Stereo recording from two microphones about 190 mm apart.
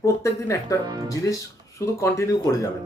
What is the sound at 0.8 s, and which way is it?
Speech, 20° right (ahead or behind).